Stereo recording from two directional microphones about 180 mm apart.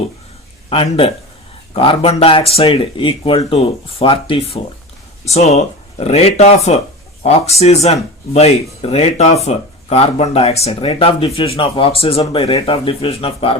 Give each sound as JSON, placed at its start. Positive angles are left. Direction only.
{"t": 0.7, "sound": "speech", "side_deg": 30}